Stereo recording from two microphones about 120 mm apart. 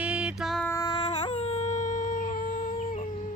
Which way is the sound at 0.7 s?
30° left (ahead or behind).